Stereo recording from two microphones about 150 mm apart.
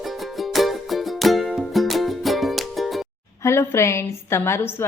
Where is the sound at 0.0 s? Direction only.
Centre (ahead or behind).